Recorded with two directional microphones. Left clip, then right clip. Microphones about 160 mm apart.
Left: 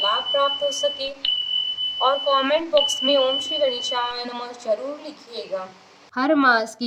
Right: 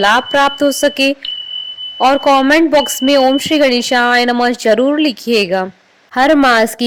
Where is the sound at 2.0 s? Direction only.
10° right (ahead or behind).